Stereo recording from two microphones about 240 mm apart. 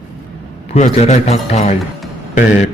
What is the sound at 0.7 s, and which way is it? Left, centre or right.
A man's voice, left.